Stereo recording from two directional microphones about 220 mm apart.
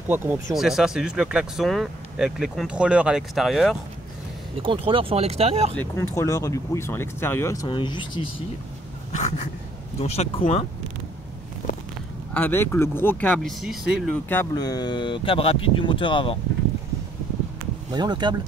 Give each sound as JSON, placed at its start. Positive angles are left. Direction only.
{"t": 0.1, "sound": "speech", "side_deg": -10}
{"t": 4.6, "sound": "speech", "side_deg": -25}
{"t": 5.8, "sound": "speech", "side_deg": 15}
{"t": 9.9, "sound": "speech", "side_deg": 30}
{"t": 12.4, "sound": "speech", "side_deg": 10}
{"t": 14.3, "sound": "speech", "side_deg": 15}
{"t": 17.9, "sound": "speech", "side_deg": -20}